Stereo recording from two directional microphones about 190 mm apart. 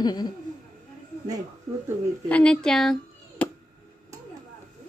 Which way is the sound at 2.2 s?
5° left (ahead or behind).